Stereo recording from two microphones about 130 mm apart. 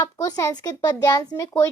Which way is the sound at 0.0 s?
25° left (ahead or behind).